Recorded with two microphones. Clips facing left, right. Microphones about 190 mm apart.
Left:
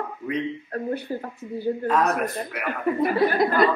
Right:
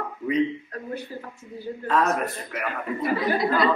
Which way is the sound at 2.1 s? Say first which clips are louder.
Left 2 dB; 60° left (ahead or behind).